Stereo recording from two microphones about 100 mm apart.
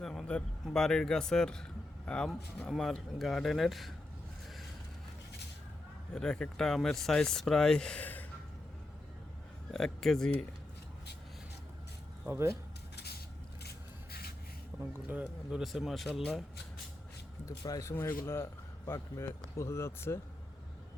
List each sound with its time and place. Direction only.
0.0 s speech: 5° left (ahead or behind)
6.1 s speech: 10° left (ahead or behind)
9.7 s speech: 5° left (ahead or behind)
12.2 s speech: 25° right (ahead or behind)
14.8 s speech: 20° right (ahead or behind); by 16.4 s centre (ahead or behind)
17.6 s speech: 35° left (ahead or behind)
17.9 s speech: 25° left (ahead or behind)